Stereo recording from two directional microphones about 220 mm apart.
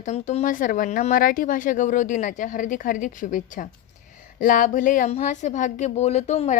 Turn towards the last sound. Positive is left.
turn(degrees=30)  # may be behind; listen again after turning